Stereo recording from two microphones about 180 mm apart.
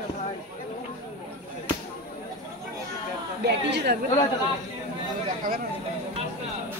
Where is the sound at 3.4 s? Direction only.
65° right (ahead or behind).